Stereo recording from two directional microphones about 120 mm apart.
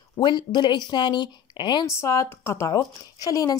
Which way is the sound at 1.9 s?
25° left (ahead or behind).